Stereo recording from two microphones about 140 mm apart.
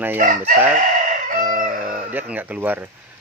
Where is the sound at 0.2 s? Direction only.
65° right (ahead or behind).